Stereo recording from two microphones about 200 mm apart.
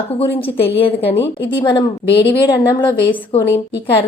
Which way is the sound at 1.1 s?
15° left (ahead or behind).